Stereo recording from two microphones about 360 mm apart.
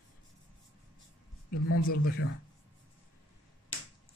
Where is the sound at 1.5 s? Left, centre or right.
Left.